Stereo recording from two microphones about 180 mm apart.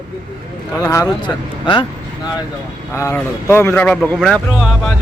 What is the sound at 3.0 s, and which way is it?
Speech, 15° left (ahead or behind).